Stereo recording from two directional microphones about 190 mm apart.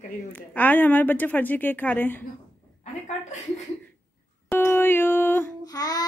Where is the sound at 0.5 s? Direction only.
10° left (ahead or behind).